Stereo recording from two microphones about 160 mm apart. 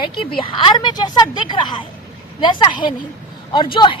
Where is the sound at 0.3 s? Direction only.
35° left (ahead or behind).